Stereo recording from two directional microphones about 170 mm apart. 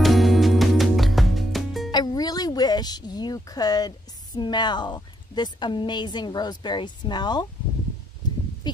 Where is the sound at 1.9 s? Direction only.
25° left (ahead or behind).